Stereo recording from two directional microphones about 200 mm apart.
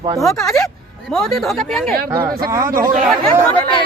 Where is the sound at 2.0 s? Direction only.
20° right (ahead or behind).